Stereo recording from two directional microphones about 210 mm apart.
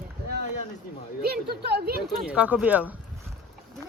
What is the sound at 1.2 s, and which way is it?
Speech, 45° right (ahead or behind).